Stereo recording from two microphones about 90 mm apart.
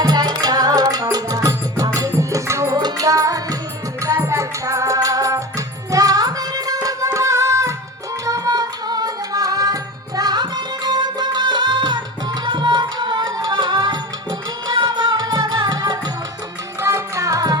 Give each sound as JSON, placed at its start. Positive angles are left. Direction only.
{"t": 0.0, "sound": "music", "side_deg": -50}
{"t": 2.7, "sound": "music", "side_deg": -45}
{"t": 8.3, "sound": "music", "side_deg": -45}
{"t": 10.2, "sound": "music", "side_deg": -50}
{"t": 16.8, "sound": "music", "side_deg": -35}